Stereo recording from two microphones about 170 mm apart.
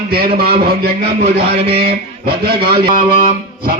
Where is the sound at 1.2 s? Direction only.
35° right (ahead or behind).